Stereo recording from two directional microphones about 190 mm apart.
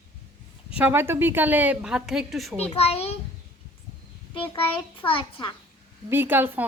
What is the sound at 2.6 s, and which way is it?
Speech, 35° left (ahead or behind).